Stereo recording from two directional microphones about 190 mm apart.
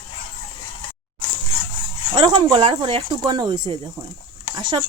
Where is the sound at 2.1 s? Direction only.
25° right (ahead or behind).